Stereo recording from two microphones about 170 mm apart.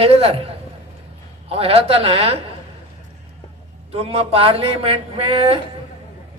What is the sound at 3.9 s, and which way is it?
A man's voice, 35° right (ahead or behind).